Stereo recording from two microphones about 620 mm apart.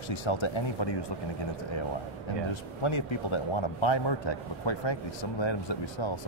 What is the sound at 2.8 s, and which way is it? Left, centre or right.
A man's voice, left.